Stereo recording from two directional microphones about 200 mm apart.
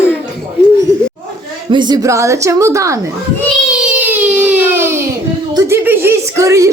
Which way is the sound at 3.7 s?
5° right (ahead or behind).